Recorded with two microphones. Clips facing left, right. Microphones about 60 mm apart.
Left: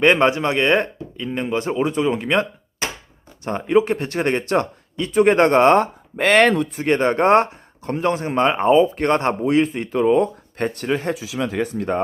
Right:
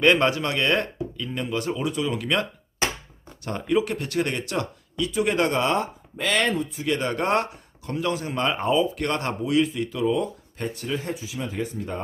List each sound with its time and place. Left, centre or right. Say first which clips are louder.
0.0 s speech: left 4 dB; left
6.8 s speech: left 9 dB; left